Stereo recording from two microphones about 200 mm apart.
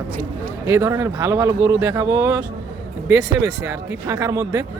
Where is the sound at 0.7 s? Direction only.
15° right (ahead or behind).